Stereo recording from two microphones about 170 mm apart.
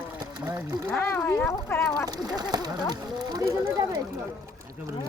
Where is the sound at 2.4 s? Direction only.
25° right (ahead or behind).